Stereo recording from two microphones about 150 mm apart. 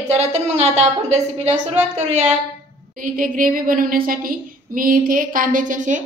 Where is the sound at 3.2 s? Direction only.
65° right (ahead or behind).